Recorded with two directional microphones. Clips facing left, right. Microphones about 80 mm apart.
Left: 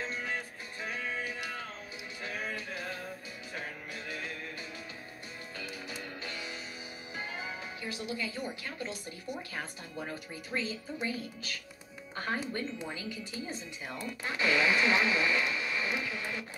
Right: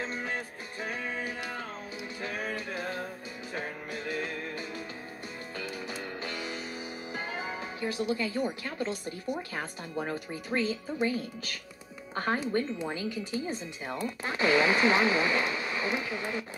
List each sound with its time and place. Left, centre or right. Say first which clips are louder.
0.1 s music: right 2 dB; right
2.2 s music: right 3 dB; right
6.2 s music: right 5 dB; right
8.6 s speech: right 6 dB; right
10.0 s speech: right 6 dB; right
14.2 s speech: right 3 dB; right